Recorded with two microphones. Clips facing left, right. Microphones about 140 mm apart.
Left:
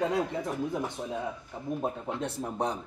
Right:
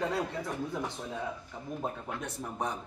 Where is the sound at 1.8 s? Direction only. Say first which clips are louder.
Left 3 dB; 25° left (ahead or behind).